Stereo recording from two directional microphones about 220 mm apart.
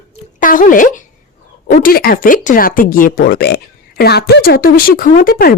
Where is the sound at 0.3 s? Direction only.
35° left (ahead or behind).